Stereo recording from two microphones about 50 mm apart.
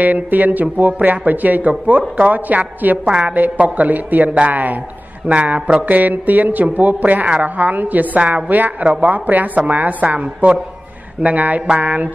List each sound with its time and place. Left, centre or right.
0.0 s speech: right
3.1 s a woman's voice: centre
3.3 s a woman's voice: right
10.0 s a woman's voice: right